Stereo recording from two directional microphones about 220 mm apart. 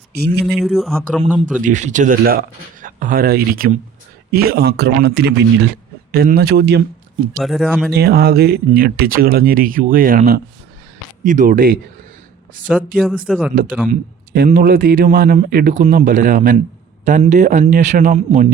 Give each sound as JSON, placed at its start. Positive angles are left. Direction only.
{"t": 0.1, "sound": "speech", "side_deg": -45}
{"t": 0.4, "sound": "speech", "side_deg": 0}
{"t": 1.6, "sound": "speech", "side_deg": -35}
{"t": 7.3, "sound": "speech", "side_deg": 0}
{"t": 7.9, "sound": "speech", "side_deg": -45}
{"t": 12.6, "sound": "speech", "side_deg": 0}
{"t": 13.9, "sound": "speech", "side_deg": -40}